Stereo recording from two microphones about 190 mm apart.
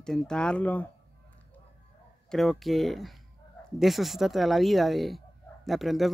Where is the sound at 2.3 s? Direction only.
Centre (ahead or behind).